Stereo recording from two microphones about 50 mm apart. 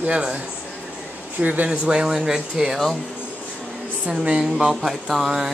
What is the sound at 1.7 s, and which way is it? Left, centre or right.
Speech, centre.